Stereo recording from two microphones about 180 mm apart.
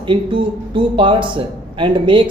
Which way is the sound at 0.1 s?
25° right (ahead or behind).